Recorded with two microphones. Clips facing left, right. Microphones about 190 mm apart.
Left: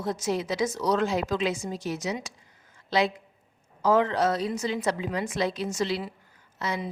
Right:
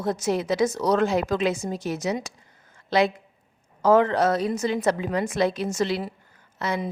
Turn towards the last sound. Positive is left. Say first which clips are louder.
# right 4 dB
turn(degrees=-55)  # may be behind; listen again after turning